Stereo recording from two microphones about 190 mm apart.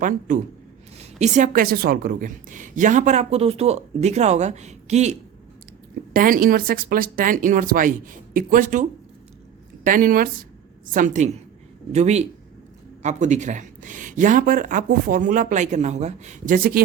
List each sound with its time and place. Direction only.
0.9 s a woman's voice: 40° right (ahead or behind)
6.1 s a woman's voice: 50° right (ahead or behind)